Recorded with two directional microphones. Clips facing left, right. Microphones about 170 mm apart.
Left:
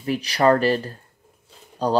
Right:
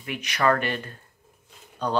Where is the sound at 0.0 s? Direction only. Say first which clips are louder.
Left 5 dB; 35° left (ahead or behind).